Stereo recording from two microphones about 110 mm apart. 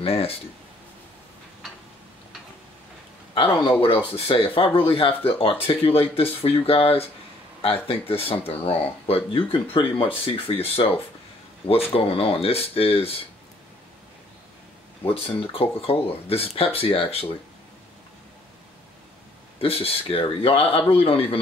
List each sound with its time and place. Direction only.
0.0 s speech: 65° left (ahead or behind)
3.8 s speech: 55° left (ahead or behind)
15.0 s speech: 55° left (ahead or behind)
19.6 s speech: 60° left (ahead or behind)